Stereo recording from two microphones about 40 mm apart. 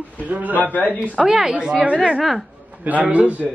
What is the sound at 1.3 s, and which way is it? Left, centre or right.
Speech, centre.